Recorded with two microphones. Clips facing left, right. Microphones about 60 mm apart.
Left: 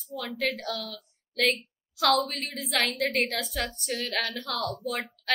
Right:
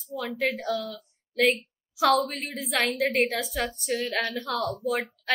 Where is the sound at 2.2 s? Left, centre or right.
Centre.